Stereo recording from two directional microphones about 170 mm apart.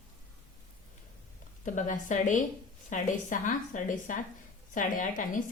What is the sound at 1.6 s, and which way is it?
A woman's voice, 50° left (ahead or behind).